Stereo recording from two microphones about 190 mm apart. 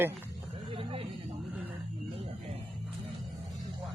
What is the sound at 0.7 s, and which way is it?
Speech, 30° right (ahead or behind).